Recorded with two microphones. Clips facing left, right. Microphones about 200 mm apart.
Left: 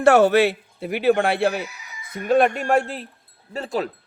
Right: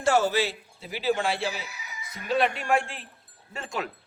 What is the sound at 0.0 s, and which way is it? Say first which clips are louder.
A man's voice: left 9 dB; 60° left (ahead or behind).